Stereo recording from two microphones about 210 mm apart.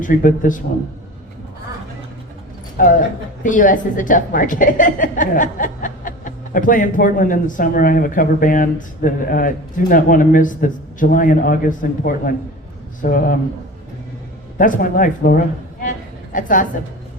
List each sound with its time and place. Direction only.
0.0 s a woman's voice: 40° left (ahead or behind)
2.8 s a woman's voice: 40° left (ahead or behind)
14.6 s a woman's voice: 40° left (ahead or behind)
15.8 s a sound: 40° left (ahead or behind)